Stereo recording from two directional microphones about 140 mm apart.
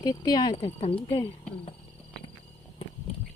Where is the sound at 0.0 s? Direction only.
25° left (ahead or behind).